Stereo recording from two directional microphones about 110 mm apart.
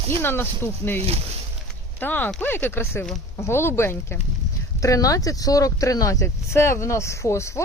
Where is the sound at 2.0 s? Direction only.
15° left (ahead or behind).